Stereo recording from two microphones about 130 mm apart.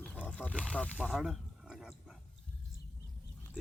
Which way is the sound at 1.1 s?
5° right (ahead or behind).